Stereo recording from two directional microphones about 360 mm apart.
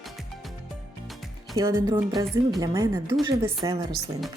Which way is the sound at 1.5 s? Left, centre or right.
Centre.